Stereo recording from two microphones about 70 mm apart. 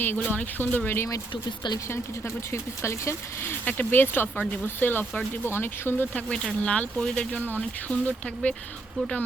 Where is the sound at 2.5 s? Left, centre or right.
Left.